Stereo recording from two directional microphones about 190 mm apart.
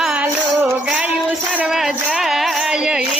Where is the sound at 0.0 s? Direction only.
5° right (ahead or behind).